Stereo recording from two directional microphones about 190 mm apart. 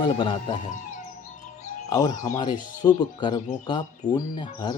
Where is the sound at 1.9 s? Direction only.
20° left (ahead or behind).